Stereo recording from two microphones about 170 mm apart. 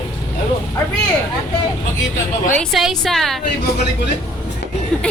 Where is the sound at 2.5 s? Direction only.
5° left (ahead or behind).